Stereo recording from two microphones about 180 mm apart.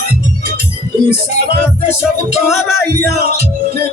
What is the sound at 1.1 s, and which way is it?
Music, 55° right (ahead or behind).